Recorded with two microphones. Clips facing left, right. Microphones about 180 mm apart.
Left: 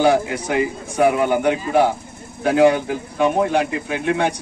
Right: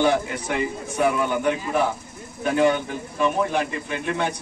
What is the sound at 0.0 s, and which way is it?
A man's voice, 75° left (ahead or behind).